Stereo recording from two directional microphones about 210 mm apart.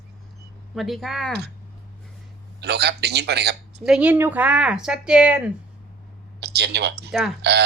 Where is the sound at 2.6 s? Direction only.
50° right (ahead or behind).